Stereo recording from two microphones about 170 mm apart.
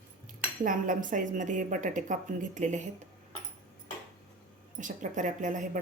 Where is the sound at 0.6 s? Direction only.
50° right (ahead or behind).